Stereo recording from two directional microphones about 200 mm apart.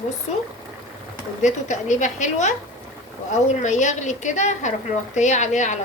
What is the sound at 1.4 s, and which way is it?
A woman's voice, 35° left (ahead or behind).